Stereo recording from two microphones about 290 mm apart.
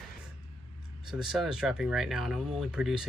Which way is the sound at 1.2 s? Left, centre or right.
Centre.